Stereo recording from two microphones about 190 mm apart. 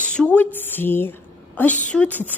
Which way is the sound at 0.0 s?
5° left (ahead or behind).